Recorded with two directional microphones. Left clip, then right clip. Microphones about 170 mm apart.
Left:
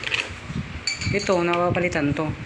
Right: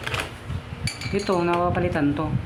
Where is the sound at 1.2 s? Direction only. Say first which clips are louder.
Left 1 dB; 5° right (ahead or behind).